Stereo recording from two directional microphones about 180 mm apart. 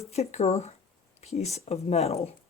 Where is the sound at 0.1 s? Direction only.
35° left (ahead or behind).